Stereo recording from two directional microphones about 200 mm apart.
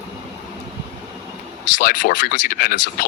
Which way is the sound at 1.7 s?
45° left (ahead or behind).